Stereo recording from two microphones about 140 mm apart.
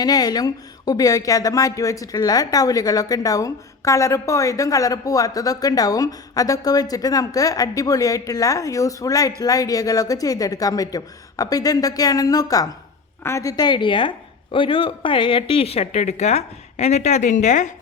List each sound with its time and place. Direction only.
0.0 s a woman's voice: 25° left (ahead or behind); by 17.7 s 60° left (ahead or behind)